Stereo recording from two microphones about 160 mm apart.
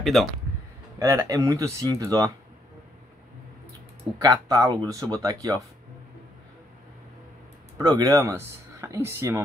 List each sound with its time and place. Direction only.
0.0 s speech: centre (ahead or behind)
0.9 s speech: 20° right (ahead or behind)
4.2 s speech: 25° right (ahead or behind)
7.7 s speech: 20° right (ahead or behind)